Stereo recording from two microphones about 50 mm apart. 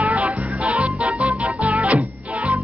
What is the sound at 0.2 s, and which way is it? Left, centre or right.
Music, right.